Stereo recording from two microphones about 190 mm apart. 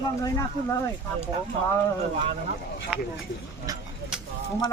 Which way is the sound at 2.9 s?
5° right (ahead or behind).